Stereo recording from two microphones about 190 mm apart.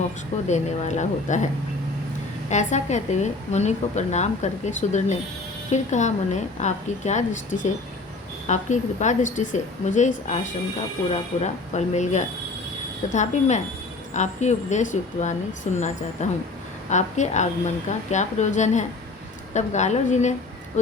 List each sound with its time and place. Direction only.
0.4 s speech: 40° left (ahead or behind)
2.5 s speech: 40° left (ahead or behind)
14.1 s speech: 40° left (ahead or behind)